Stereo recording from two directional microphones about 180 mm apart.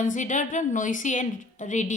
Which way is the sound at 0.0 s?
45° left (ahead or behind).